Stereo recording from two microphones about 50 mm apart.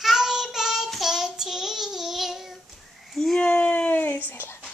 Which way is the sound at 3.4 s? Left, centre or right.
Left.